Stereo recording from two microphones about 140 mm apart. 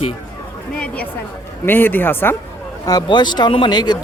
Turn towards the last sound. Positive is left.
turn(degrees=30)  # may be behind; listen again after turning